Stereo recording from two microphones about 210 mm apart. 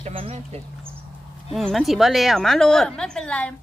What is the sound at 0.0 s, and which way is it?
Speech, 30° right (ahead or behind).